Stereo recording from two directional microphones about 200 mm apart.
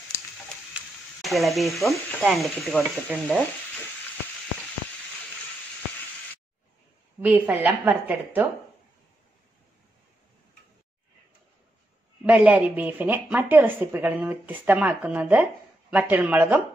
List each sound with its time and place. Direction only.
0.7 s speech: centre (ahead or behind)
7.2 s a woman's voice: 10° right (ahead or behind)
12.3 s a woman's voice: 10° right (ahead or behind)